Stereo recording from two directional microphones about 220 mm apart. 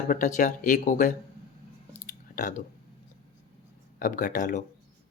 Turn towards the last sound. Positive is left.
turn(degrees=35)  # may be behind; listen again after turning